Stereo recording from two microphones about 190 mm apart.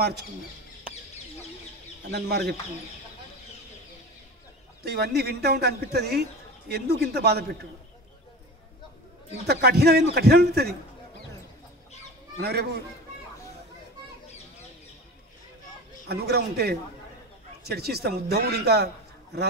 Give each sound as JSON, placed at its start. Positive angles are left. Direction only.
{"t": 2.0, "sound": "speech", "side_deg": -60}
{"t": 4.8, "sound": "speech", "side_deg": -55}
{"t": 9.5, "sound": "speech", "side_deg": -55}
{"t": 12.4, "sound": "speech", "side_deg": -55}
{"t": 16.1, "sound": "speech", "side_deg": -55}